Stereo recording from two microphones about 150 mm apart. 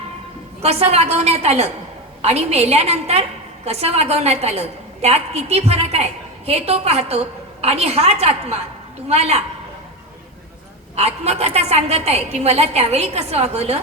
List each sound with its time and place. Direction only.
0.6 s a woman's voice: 45° right (ahead or behind)
10.9 s a woman's voice: 45° right (ahead or behind)